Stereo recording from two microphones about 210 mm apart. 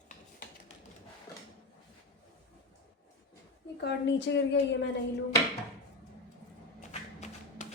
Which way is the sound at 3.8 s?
55° left (ahead or behind).